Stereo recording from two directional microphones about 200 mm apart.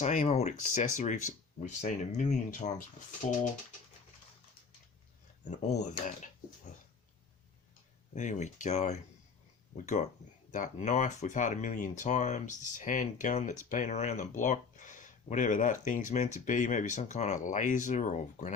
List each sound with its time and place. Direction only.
0.0 s speech: 35° left (ahead or behind)
5.5 s speech: 35° left (ahead or behind)
8.1 s speech: 35° left (ahead or behind)